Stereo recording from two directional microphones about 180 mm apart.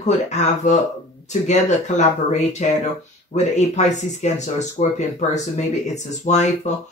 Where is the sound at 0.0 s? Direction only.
40° left (ahead or behind).